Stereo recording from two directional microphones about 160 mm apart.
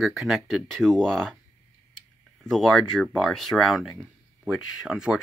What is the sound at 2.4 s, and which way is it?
Speech, centre (ahead or behind).